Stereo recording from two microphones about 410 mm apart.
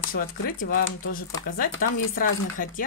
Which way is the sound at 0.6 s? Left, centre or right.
Left.